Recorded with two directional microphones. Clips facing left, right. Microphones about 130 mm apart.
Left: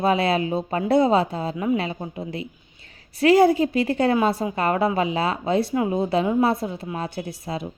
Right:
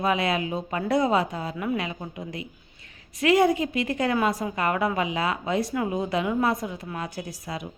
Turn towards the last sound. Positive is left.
turn(degrees=30)  # may be behind; listen again after turning